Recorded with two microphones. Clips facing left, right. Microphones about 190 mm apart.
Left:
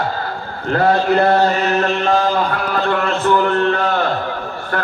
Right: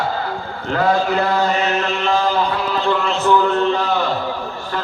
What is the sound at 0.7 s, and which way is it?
Speech, 60° left (ahead or behind).